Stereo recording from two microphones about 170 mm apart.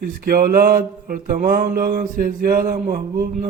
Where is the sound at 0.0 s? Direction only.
60° right (ahead or behind).